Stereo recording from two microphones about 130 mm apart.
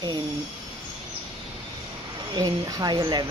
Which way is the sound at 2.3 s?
30° right (ahead or behind).